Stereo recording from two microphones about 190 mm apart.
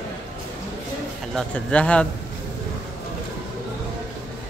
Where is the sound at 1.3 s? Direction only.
5° left (ahead or behind).